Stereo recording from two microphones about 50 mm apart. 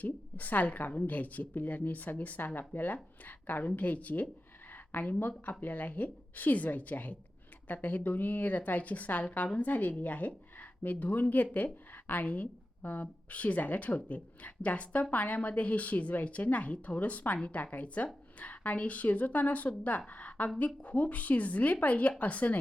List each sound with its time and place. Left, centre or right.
0.0 s a woman's voice: left